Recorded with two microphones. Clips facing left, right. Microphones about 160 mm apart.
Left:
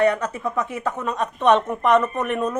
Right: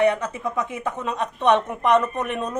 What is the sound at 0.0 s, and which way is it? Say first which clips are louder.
A woman's voice: left 1 dB; 20° right (ahead or behind).